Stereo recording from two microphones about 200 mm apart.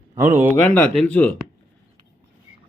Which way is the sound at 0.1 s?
10° right (ahead or behind).